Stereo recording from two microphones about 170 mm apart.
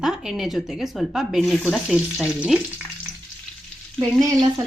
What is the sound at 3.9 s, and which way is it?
Frying, 25° right (ahead or behind).